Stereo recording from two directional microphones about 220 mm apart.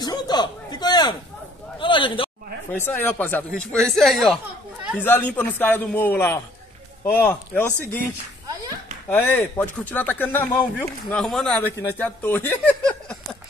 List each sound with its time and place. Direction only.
0.0 s a sound: 20° left (ahead or behind)
2.7 s speech: 10° left (ahead or behind)
9.1 s speech: 10° left (ahead or behind)